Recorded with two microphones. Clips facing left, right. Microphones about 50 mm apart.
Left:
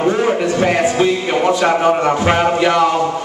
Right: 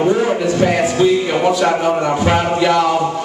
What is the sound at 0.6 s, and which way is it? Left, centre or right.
Music, centre.